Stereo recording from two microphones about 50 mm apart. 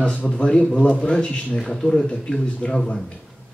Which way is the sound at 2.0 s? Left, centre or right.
Left.